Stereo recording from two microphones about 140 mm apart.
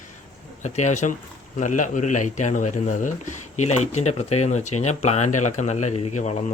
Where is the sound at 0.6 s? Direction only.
60° left (ahead or behind).